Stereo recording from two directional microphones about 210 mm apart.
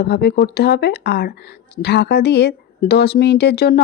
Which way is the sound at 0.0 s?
50° left (ahead or behind).